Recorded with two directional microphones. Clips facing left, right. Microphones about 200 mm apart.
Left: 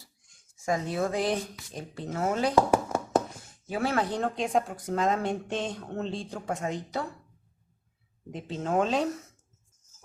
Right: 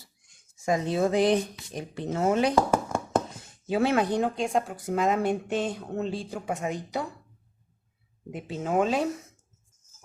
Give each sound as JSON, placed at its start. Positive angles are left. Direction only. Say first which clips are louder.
{"t": 0.6, "sound": "speech", "louder": "right 3 dB", "side_deg": -20}
{"t": 2.6, "sound": "a sound", "louder": "left 1 dB", "side_deg": 5}
{"t": 3.7, "sound": "speech", "louder": "right 4 dB", "side_deg": -20}
{"t": 4.4, "sound": "speech", "louder": "even", "side_deg": 0}
{"t": 8.3, "sound": "speech", "louder": "right 1 dB", "side_deg": -10}